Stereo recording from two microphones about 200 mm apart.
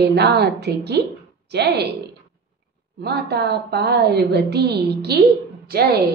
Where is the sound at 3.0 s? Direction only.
55° right (ahead or behind).